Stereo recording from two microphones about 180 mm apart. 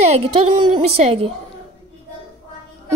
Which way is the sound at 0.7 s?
35° right (ahead or behind).